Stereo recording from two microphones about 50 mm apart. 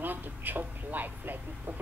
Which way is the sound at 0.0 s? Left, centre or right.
Right.